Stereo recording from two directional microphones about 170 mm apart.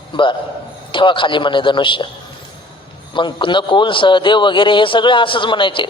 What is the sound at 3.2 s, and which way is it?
A man's voice, 30° left (ahead or behind).